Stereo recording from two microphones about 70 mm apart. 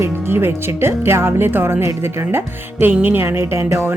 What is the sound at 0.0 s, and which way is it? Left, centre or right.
Speech, right.